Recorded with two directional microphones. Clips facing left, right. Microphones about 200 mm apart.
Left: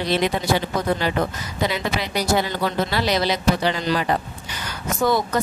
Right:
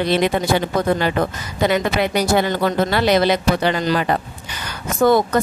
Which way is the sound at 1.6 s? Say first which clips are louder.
Right 6 dB; 55° right (ahead or behind).